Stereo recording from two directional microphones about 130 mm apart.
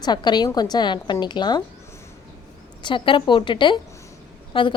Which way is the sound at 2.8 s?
40° left (ahead or behind).